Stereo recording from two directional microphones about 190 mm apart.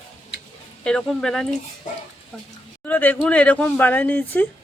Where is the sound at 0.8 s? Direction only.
5° left (ahead or behind).